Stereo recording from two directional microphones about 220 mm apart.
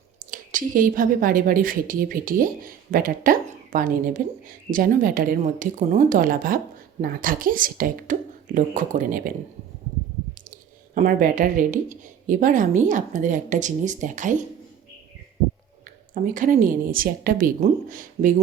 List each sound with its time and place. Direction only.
0.3 s a woman's voice: 40° right (ahead or behind)
10.5 s a woman's voice: 35° right (ahead or behind)
16.1 s a woman's voice: 35° right (ahead or behind)